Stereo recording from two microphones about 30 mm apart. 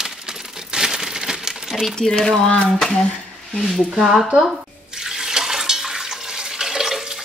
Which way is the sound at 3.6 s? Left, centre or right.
Centre.